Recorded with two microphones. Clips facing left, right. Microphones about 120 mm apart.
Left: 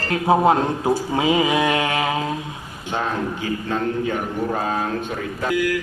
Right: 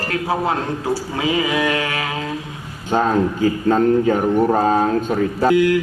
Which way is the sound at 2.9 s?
40° right (ahead or behind).